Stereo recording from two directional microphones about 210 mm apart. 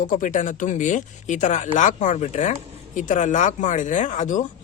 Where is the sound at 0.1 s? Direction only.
40° left (ahead or behind).